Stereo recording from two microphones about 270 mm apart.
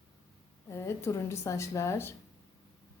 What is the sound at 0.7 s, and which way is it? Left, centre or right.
A woman's voice, centre.